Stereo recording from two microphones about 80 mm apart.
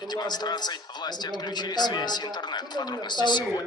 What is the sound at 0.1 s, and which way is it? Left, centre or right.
A man's voice, left.